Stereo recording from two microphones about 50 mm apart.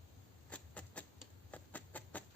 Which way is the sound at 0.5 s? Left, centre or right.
Left.